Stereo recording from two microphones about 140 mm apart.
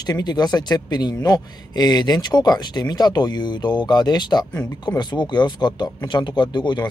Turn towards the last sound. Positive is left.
turn(degrees=30)  # may be behind; listen again after turning